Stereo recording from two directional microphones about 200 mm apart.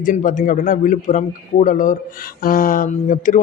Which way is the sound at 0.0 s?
40° left (ahead or behind).